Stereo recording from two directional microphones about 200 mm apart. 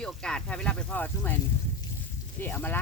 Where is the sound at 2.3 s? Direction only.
10° left (ahead or behind).